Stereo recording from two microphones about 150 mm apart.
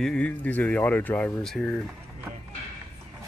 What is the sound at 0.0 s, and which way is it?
Speech, 5° left (ahead or behind).